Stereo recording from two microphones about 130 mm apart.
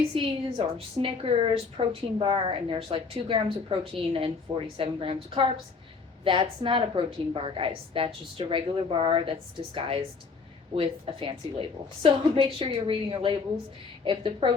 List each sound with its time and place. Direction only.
0.1 s a woman's voice: 40° right (ahead or behind)